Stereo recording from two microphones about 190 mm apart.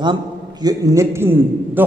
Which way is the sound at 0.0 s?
20° right (ahead or behind).